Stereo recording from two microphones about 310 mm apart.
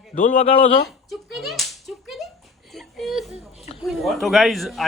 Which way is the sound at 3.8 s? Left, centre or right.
Centre.